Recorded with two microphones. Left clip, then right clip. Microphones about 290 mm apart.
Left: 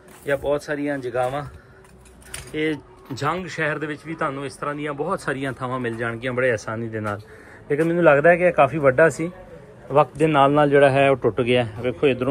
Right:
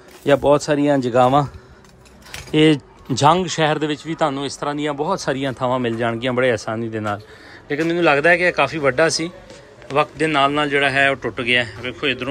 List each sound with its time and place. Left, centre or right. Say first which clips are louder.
0.5 s speech: right 8 dB; right
2.5 s a man's voice: right 10 dB; right; by 12.3 s centre